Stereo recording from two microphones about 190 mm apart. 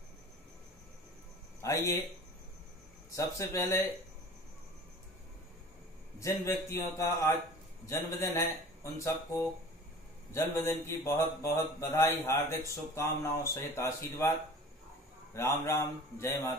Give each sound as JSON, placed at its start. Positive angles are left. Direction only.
{"t": 1.6, "sound": "speech", "side_deg": 15}
{"t": 3.2, "sound": "a man's voice", "side_deg": 15}
{"t": 6.1, "sound": "a man's voice", "side_deg": 15}
{"t": 15.3, "sound": "a man's voice", "side_deg": 15}